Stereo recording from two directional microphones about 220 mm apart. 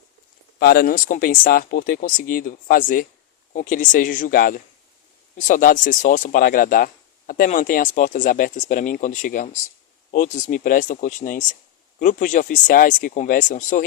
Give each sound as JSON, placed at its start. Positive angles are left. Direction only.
{"t": 0.6, "sound": "speech", "side_deg": 45}